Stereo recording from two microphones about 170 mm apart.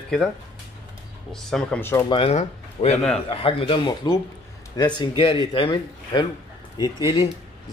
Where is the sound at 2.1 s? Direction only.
35° left (ahead or behind).